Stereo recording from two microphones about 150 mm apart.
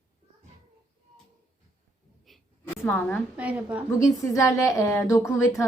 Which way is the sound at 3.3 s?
10° right (ahead or behind).